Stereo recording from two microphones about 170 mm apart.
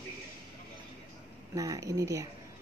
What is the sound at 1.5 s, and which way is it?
Speech, 20° right (ahead or behind).